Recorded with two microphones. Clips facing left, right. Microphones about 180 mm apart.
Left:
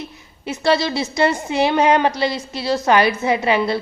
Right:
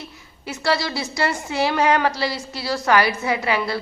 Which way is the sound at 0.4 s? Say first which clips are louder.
Left 5 dB; 20° left (ahead or behind).